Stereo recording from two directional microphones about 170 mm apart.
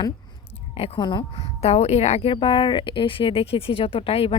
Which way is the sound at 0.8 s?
30° left (ahead or behind).